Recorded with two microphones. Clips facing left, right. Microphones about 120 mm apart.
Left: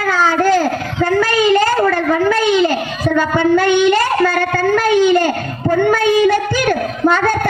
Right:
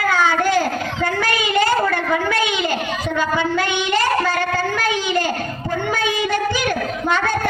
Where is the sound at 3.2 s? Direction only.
50° left (ahead or behind).